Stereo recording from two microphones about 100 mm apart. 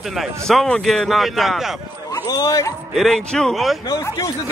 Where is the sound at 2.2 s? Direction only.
35° left (ahead or behind).